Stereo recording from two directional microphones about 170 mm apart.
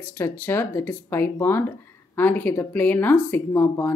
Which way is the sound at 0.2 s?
15° left (ahead or behind).